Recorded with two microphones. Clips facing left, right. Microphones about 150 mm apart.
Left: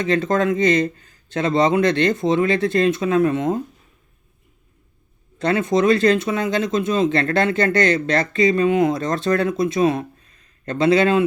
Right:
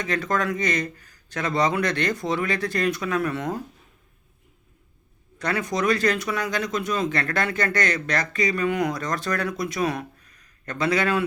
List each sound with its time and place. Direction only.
0.0 s speech: 25° left (ahead or behind)
5.4 s speech: 25° left (ahead or behind)